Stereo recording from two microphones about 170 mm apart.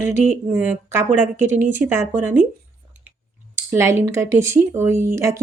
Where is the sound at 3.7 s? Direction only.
20° right (ahead or behind).